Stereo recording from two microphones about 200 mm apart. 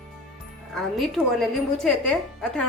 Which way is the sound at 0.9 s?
Centre (ahead or behind).